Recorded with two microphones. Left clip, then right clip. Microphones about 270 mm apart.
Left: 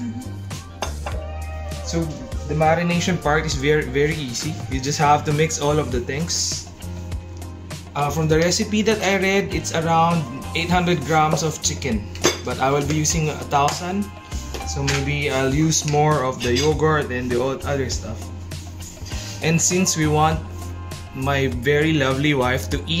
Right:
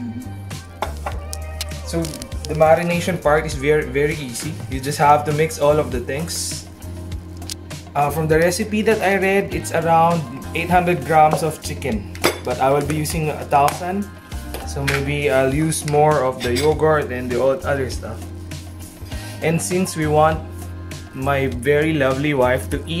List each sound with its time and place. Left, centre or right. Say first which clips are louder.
1.9 s speech: right 3 dB; centre
7.9 s speech: right 3 dB; right
16.1 s speech: right 3 dB; centre
17.6 s speech: right 3 dB; centre
19.4 s speech: even; centre